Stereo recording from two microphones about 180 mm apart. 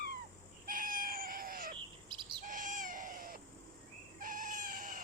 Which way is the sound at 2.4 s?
45° right (ahead or behind).